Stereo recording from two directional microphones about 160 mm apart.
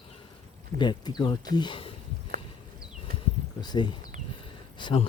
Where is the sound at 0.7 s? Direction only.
30° left (ahead or behind).